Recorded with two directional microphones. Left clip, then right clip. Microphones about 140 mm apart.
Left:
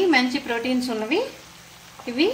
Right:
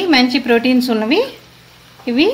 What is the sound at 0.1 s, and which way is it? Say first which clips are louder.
Speech: right 8 dB; 80° right.